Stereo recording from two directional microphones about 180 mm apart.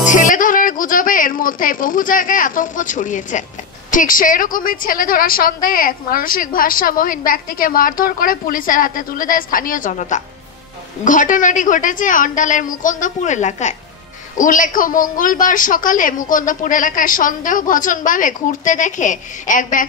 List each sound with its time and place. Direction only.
0.0 s a woman's voice: 45° left (ahead or behind)